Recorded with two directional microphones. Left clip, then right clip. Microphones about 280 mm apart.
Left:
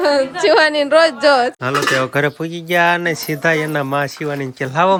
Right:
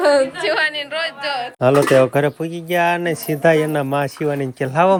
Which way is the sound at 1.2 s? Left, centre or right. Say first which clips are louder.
Left 11 dB; left.